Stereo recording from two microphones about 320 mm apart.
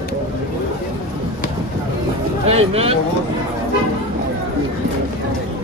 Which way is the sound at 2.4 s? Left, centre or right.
Centre.